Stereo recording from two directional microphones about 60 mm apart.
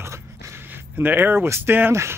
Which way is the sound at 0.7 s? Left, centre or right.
Right.